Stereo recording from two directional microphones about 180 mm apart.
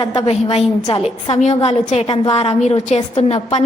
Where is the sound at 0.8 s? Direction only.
20° left (ahead or behind).